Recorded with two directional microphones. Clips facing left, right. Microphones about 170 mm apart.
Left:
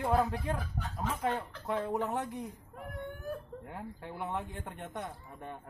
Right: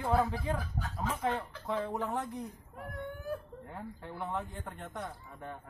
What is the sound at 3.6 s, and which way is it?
Speech, 5° left (ahead or behind).